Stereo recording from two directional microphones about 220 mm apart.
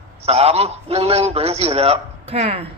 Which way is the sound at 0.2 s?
30° right (ahead or behind).